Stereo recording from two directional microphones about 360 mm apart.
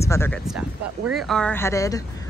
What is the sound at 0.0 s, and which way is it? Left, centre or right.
A woman's voice, centre.